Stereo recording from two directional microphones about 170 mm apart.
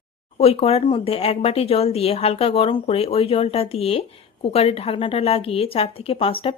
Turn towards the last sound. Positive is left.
turn(degrees=35)  # may be behind; listen again after turning